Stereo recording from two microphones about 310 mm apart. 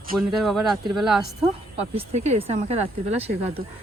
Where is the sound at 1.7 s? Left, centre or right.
Centre.